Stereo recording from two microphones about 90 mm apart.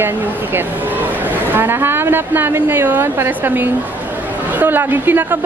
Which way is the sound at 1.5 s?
25° right (ahead or behind).